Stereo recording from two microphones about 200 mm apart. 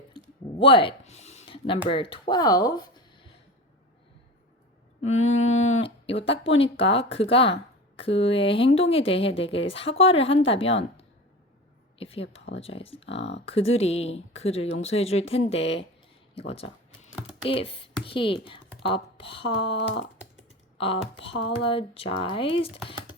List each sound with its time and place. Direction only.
0.6 s speech: 25° left (ahead or behind)
4.9 s mantra: 35° left (ahead or behind)
5.4 s speech: 35° left (ahead or behind)
13.1 s speech: 65° left (ahead or behind)
13.4 s speech: 30° left (ahead or behind)
19.7 s speech: 60° left (ahead or behind)
20.7 s speech: 30° left (ahead or behind)